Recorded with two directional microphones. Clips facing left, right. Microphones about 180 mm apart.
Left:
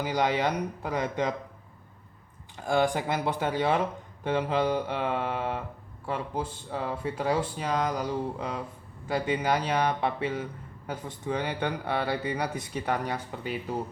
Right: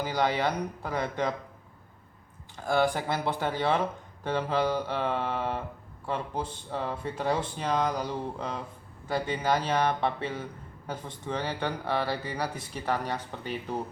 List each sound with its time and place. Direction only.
0.0 s speech: 15° left (ahead or behind)
2.6 s speech: 15° left (ahead or behind)